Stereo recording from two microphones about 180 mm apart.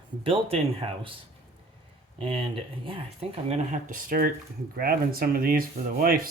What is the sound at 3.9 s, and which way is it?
Speech, 50° right (ahead or behind).